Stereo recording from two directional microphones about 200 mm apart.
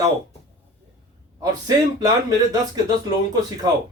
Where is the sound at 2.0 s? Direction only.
20° right (ahead or behind).